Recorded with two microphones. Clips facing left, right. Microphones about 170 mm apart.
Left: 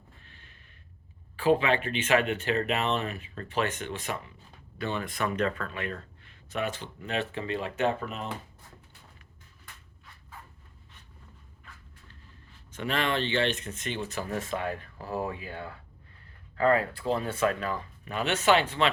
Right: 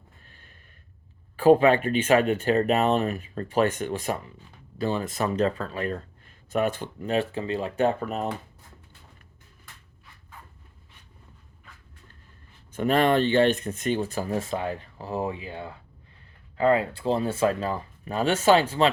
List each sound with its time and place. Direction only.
0.3 s a sound: 45° right (ahead or behind)
1.4 s speech: 45° right (ahead or behind)
6.5 s speech: 50° right (ahead or behind)
12.7 s speech: 45° right (ahead or behind)